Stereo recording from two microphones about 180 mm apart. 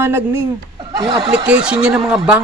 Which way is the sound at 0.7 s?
25° right (ahead or behind).